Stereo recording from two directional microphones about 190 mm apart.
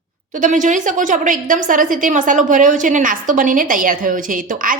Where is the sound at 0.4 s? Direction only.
40° right (ahead or behind).